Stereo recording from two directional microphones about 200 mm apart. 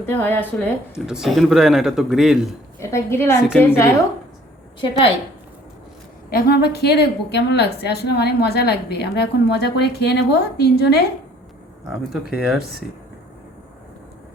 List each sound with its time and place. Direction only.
0.0 s a woman's voice: 10° left (ahead or behind)
0.9 s a man's voice: 5° right (ahead or behind)
2.9 s a woman's voice: 15° left (ahead or behind)
6.3 s a woman's voice: 50° left (ahead or behind)
11.9 s a man's voice: 5° right (ahead or behind)